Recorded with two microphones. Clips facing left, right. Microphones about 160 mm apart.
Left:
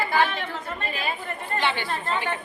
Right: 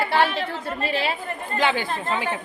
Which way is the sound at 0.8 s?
80° right.